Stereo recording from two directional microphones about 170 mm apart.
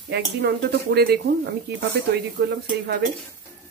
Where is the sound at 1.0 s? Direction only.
65° right (ahead or behind).